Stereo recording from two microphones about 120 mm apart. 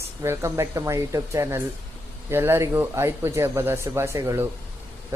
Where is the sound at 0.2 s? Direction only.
25° right (ahead or behind).